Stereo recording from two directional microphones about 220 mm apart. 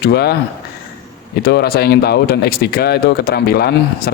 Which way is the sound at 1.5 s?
45° left (ahead or behind).